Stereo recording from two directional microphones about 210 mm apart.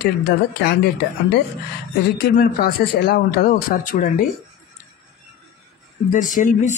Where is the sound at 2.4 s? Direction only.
45° left (ahead or behind).